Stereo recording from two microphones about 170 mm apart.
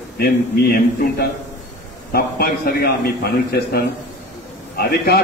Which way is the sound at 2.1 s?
65° left (ahead or behind).